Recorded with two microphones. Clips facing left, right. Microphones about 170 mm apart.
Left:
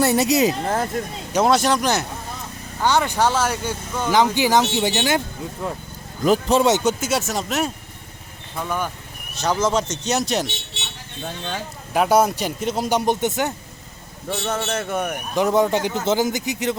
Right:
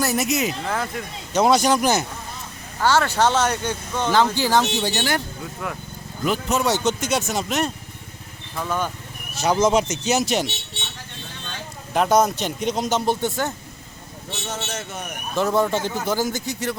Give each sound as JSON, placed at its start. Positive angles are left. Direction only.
{"t": 0.0, "sound": "speech", "side_deg": 30}
{"t": 1.3, "sound": "speech", "side_deg": 0}
{"t": 2.8, "sound": "speech", "side_deg": 15}
{"t": 7.0, "sound": "speech", "side_deg": 5}
{"t": 9.4, "sound": "speech", "side_deg": -10}
{"t": 11.9, "sound": "speech", "side_deg": 10}
{"t": 14.4, "sound": "a man's voice", "side_deg": 55}
{"t": 15.4, "sound": "speech", "side_deg": 15}